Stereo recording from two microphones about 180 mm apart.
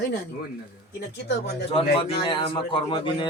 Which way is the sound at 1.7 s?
30° left (ahead or behind).